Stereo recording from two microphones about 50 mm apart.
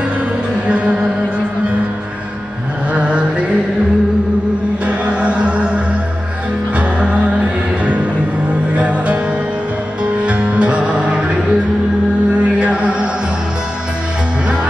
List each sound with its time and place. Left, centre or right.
0.7 s music: right
2.9 s vehicle: right
4.8 s music: right
7.8 s music: right
10.2 s music: right
12.4 s music: right